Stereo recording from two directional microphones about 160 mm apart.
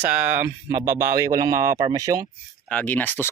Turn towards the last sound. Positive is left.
turn(degrees=10)  # may be behind; listen again after turning